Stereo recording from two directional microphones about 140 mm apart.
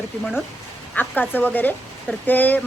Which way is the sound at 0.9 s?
10° left (ahead or behind).